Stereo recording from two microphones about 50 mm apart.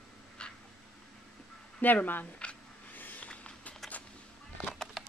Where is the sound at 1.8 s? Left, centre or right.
Left.